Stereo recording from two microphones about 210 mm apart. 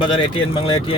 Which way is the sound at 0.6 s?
25° left (ahead or behind).